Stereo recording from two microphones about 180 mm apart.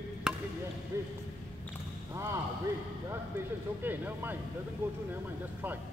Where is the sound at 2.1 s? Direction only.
15° right (ahead or behind).